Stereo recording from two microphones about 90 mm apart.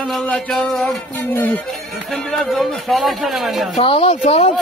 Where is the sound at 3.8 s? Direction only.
90° left.